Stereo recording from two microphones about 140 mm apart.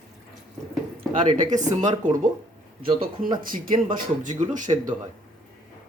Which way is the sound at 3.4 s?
80° right.